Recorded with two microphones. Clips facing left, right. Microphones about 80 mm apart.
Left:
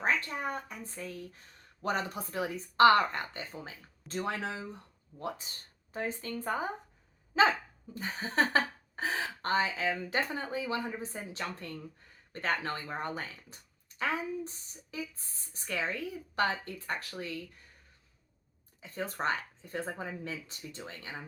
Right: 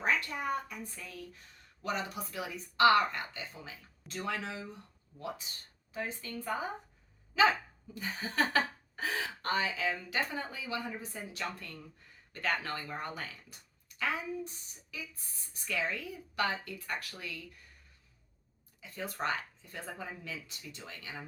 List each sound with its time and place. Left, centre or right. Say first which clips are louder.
0.0 s speech: left 1 dB; left
5.9 s speech: left 3 dB; left
18.8 s speech: left 2 dB; left